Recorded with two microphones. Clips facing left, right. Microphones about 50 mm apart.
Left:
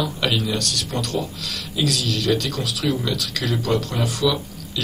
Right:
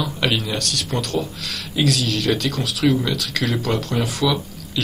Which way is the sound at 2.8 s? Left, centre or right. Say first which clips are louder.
Right 5 dB; right.